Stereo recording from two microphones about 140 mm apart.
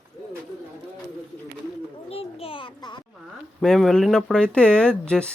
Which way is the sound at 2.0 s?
45° left (ahead or behind).